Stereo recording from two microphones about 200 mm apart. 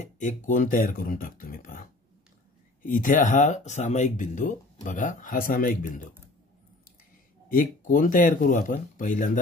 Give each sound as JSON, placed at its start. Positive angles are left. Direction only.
{"t": 0.0, "sound": "speech", "side_deg": 35}
{"t": 7.4, "sound": "speech", "side_deg": 45}